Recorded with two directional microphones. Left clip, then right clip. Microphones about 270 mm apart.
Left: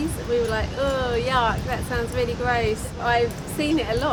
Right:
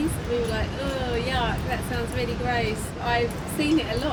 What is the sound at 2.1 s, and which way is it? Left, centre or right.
A woman's voice, left.